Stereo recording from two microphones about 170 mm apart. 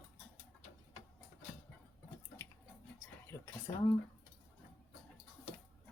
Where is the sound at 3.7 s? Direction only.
30° left (ahead or behind).